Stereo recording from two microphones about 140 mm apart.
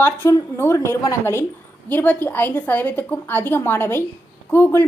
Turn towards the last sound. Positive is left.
turn(degrees=15)  # may be behind; listen again after turning